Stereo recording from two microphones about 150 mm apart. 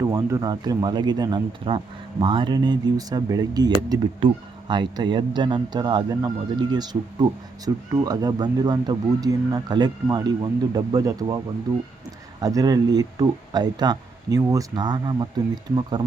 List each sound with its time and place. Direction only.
0.1 s speech: 20° right (ahead or behind)
12.4 s speech: 25° right (ahead or behind)